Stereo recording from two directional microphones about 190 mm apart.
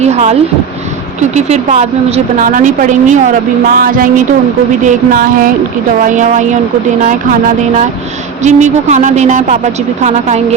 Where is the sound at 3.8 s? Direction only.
50° right (ahead or behind).